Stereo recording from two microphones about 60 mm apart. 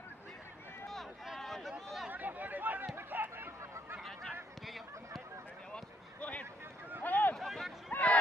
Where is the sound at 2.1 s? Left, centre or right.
Right.